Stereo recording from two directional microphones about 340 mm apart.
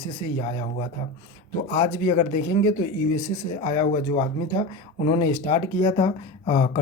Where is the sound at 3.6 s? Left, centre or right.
Centre.